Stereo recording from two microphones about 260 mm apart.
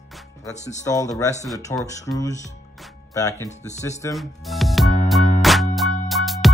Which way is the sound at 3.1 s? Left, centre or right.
Centre.